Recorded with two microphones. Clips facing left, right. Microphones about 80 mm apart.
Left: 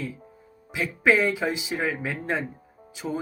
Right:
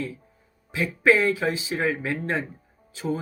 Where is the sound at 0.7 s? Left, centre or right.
Centre.